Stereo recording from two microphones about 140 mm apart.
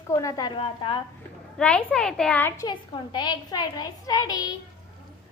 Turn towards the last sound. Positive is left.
turn(degrees=25)  # may be behind; listen again after turning